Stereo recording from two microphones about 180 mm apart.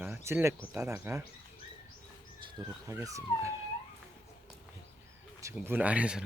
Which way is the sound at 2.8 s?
15° right (ahead or behind).